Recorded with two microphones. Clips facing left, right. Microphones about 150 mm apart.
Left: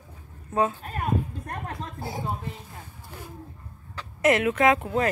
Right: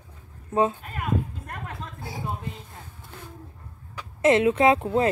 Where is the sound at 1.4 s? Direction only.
40° left (ahead or behind).